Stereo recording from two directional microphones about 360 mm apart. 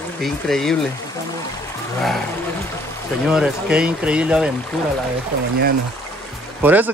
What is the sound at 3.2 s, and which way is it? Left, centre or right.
Speech, centre.